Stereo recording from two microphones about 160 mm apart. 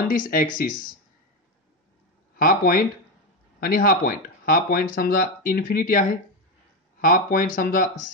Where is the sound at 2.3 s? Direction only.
60° left (ahead or behind).